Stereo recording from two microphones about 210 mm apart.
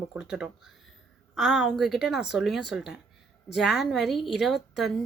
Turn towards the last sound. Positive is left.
turn(degrees=0)  # may be behind; listen again after turning